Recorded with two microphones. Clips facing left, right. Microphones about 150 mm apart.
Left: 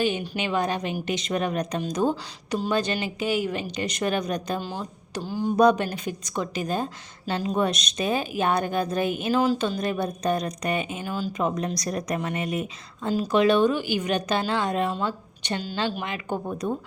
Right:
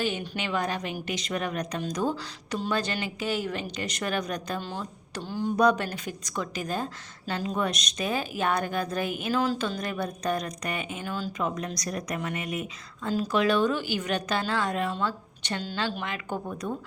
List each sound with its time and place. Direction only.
0.0 s a woman's voice: 20° left (ahead or behind)
5.2 s speech: 10° left (ahead or behind)
5.5 s a woman's voice: 25° left (ahead or behind)
11.3 s a woman's voice: 25° left (ahead or behind)